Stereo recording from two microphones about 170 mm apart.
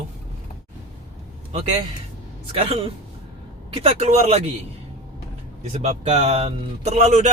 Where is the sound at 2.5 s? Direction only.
35° right (ahead or behind).